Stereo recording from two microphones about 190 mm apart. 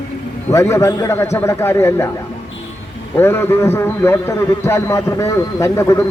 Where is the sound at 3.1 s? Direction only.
10° left (ahead or behind).